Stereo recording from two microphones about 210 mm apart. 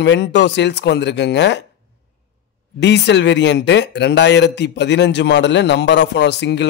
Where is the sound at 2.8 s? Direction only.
55° left (ahead or behind).